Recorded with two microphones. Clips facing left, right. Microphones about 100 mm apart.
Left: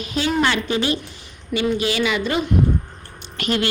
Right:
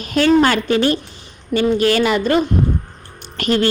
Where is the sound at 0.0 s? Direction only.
55° right (ahead or behind).